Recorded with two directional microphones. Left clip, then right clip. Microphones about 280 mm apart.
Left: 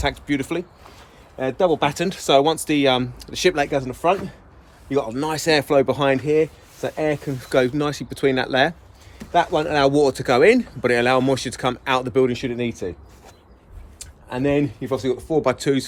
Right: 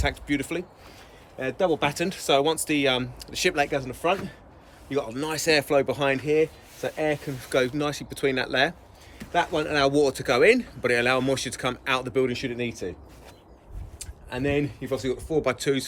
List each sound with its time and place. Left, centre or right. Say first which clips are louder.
0.0 s speech: left 4 dB; centre
14.0 s speech: left 5 dB; centre